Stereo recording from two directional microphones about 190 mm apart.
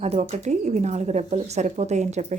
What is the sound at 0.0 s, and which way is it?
Speech, 35° right (ahead or behind).